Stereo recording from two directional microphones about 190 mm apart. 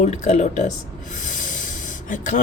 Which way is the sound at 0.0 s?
35° left (ahead or behind).